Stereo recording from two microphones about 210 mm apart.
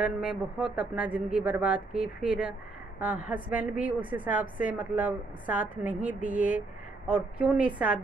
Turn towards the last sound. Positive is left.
turn(degrees=-5)  # may be behind; listen again after turning